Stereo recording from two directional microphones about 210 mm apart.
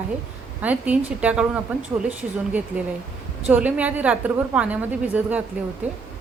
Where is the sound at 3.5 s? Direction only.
5° right (ahead or behind).